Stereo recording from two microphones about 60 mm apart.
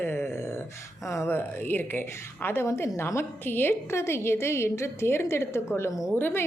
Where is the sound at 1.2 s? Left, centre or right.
Left.